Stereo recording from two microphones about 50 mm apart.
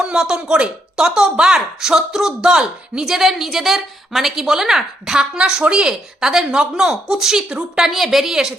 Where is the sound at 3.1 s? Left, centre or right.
Centre.